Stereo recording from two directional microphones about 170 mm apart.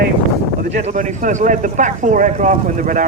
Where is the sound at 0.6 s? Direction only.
50° right (ahead or behind).